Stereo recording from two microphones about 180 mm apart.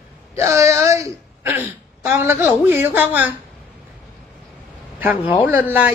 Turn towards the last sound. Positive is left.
turn(degrees=-10)  # may be behind; listen again after turning